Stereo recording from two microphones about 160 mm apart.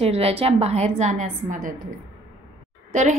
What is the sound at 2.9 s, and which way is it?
Speech, 50° right (ahead or behind).